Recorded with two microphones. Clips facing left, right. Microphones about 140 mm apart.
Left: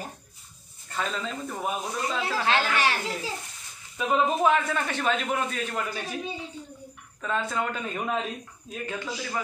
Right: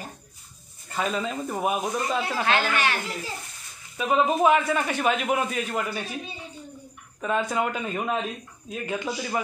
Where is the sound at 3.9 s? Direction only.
10° right (ahead or behind).